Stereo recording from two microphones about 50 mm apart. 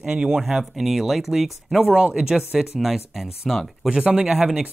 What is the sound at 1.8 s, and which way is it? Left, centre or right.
Speech, centre.